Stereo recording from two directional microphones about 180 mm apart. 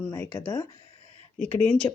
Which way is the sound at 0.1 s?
15° left (ahead or behind).